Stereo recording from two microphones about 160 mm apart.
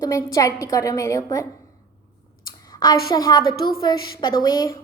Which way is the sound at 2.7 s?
25° left (ahead or behind).